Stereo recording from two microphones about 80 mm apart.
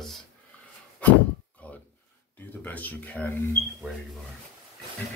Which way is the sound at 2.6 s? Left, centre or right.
Left.